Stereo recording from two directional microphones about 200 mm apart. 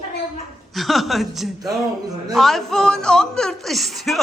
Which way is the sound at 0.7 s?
Centre (ahead or behind).